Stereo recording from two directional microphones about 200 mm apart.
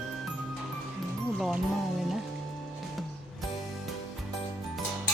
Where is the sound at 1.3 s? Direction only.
Centre (ahead or behind).